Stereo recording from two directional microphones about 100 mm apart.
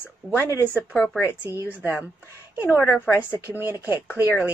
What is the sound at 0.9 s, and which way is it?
Speech, 10° left (ahead or behind).